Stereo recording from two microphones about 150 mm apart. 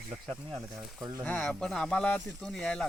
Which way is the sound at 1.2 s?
5° left (ahead or behind).